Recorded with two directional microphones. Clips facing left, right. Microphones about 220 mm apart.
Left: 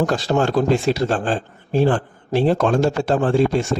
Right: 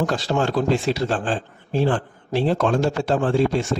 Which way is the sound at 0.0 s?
45° left (ahead or behind).